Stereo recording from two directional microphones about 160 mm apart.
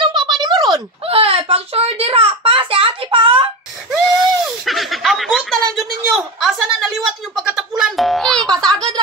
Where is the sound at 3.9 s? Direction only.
Centre (ahead or behind).